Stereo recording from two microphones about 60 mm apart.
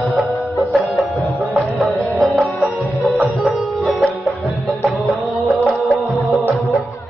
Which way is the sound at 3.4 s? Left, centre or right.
Centre.